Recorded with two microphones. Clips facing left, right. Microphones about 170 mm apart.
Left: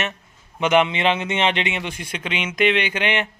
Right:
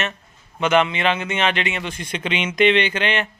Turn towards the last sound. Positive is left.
turn(degrees=15)  # may be behind; listen again after turning